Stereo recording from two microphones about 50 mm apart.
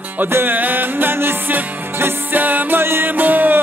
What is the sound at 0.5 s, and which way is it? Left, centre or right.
Music, right.